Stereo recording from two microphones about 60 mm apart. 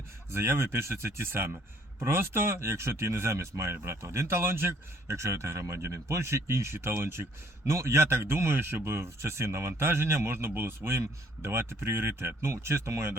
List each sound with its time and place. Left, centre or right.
0.3 s speech: right